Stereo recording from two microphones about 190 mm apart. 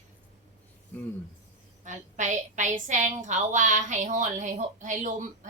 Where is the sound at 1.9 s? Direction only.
40° right (ahead or behind).